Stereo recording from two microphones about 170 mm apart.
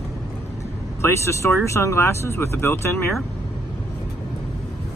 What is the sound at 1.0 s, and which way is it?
Speech, 15° left (ahead or behind).